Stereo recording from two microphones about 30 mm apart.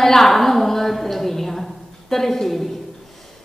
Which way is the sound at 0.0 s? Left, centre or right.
Centre.